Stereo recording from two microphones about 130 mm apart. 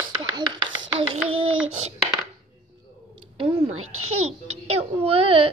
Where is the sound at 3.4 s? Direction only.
35° right (ahead or behind).